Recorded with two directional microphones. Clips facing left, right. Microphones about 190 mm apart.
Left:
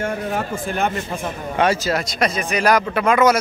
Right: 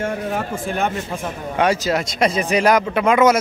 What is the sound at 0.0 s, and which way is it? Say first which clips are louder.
Speech: even; centre (ahead or behind).